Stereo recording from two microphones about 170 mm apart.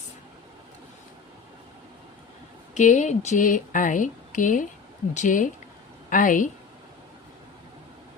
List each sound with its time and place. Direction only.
2.7 s speech: 45° left (ahead or behind)